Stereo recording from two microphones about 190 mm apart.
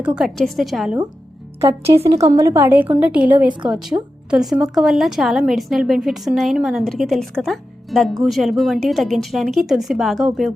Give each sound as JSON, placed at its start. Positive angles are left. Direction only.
{"t": 0.0, "sound": "a woman's voice", "side_deg": -5}
{"t": 2.0, "sound": "a woman's voice", "side_deg": -15}